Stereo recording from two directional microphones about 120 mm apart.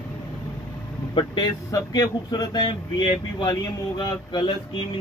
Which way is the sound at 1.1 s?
40° left (ahead or behind).